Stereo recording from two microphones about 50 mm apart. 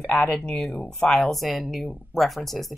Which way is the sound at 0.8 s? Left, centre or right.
Centre.